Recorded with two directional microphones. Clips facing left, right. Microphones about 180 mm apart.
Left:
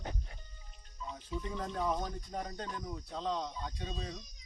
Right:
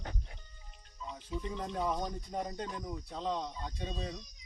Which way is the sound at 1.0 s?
20° right (ahead or behind).